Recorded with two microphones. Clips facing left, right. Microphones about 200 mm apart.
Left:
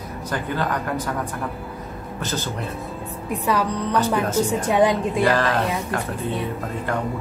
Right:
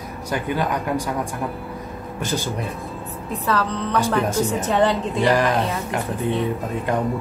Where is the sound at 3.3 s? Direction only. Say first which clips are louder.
Left 1 dB; 15° left (ahead or behind).